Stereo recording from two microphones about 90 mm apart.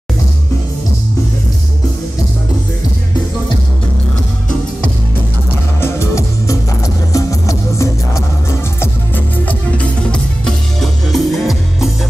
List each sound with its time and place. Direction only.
5.8 s music: 30° left (ahead or behind)
8.8 s music: 20° left (ahead or behind); by 11.9 s centre (ahead or behind)